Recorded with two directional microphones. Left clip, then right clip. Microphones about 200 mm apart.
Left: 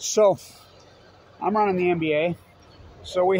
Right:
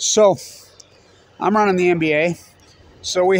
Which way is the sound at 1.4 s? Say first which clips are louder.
Right 6 dB; 65° right (ahead or behind).